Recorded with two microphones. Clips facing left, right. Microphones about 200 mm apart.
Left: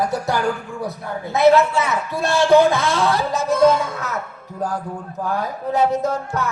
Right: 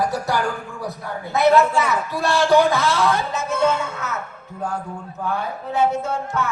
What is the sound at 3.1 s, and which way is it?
Speech, 35° left (ahead or behind).